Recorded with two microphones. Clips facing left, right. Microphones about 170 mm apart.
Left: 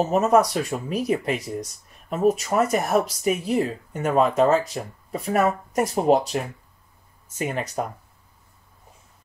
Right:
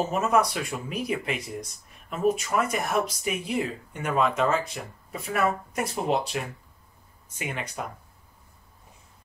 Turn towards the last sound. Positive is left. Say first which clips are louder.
# left 7 dB
turn(degrees=40)  # may be behind; listen again after turning